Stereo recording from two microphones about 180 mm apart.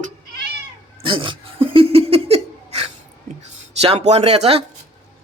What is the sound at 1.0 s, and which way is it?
Laughter, 25° right (ahead or behind).